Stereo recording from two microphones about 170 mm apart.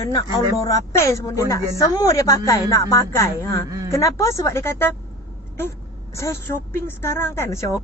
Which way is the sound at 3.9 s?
20° left (ahead or behind).